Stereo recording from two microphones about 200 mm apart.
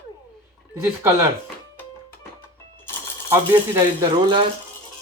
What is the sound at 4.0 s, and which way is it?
Speech, 25° right (ahead or behind).